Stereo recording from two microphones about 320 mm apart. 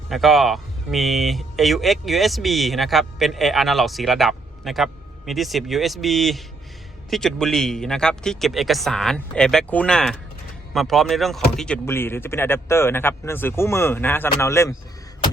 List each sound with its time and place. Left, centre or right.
0.1 s speech: centre